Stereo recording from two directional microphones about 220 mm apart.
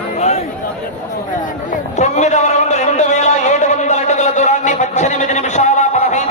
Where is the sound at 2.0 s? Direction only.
30° left (ahead or behind).